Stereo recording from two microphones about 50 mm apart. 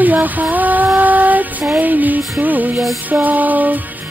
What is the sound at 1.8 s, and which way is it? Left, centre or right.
Female singing, right.